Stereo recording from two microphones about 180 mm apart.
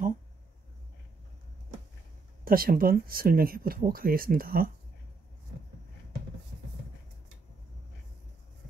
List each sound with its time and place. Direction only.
2.4 s speech: 55° right (ahead or behind)